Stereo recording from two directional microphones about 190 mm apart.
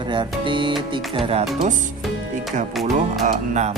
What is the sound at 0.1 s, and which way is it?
Speech, 25° right (ahead or behind).